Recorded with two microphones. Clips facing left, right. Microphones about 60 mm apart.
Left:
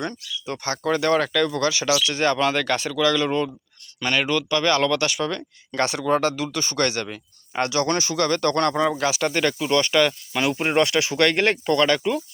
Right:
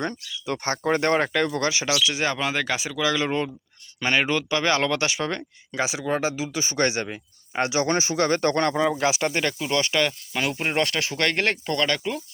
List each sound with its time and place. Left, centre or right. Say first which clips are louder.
0.4 s speech: even; right
5.7 s speech: left 4 dB; centre
9.2 s speech: left 3 dB; centre